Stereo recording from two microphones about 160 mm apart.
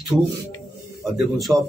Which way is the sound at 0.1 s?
Centre (ahead or behind).